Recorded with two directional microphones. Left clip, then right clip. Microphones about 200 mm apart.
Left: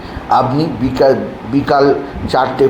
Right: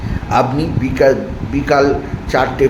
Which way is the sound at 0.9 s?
5° left (ahead or behind).